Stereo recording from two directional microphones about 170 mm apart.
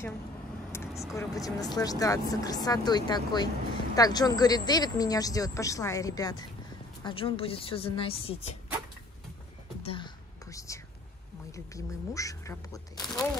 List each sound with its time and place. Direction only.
0.7 s vehicle: 15° left (ahead or behind)
1.1 s a woman's voice: 20° left (ahead or behind)
9.8 s whispering: 25° left (ahead or behind)
11.5 s speech: 20° left (ahead or behind)